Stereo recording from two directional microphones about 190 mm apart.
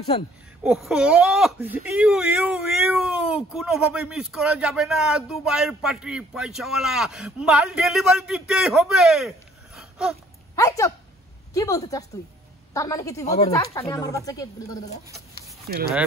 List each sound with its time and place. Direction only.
0.7 s speech: 5° right (ahead or behind)
9.8 s a sound: 5° right (ahead or behind)
10.5 s speech: 15° left (ahead or behind)
15.7 s speech: 50° right (ahead or behind)